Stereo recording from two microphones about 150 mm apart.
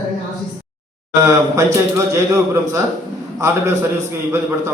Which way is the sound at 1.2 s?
20° right (ahead or behind).